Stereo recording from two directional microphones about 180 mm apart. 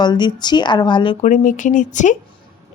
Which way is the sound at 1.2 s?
45° left (ahead or behind).